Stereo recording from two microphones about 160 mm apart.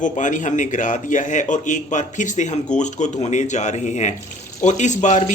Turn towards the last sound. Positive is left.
turn(degrees=50)  # may be behind; listen again after turning